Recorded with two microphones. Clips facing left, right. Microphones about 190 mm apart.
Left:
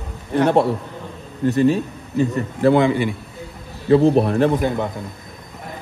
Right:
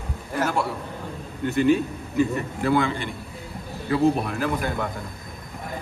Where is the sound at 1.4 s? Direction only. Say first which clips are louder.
Left 3 dB; 35° left (ahead or behind).